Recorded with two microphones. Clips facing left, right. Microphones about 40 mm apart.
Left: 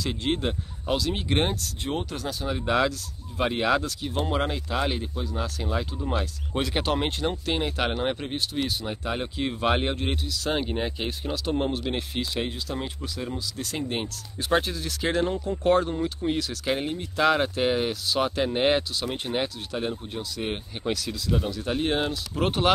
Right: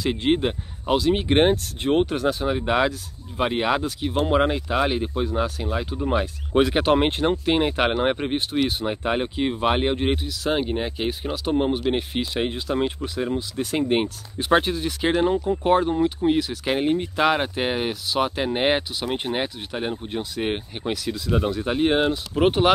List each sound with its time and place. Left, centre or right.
0.0 s speech: right
1.4 s speech: right
2.4 s speech: centre
5.0 s speech: right
5.6 s speech: centre
20.8 s speech: centre
21.1 s speech: right
21.6 s speech: centre
22.4 s speech: centre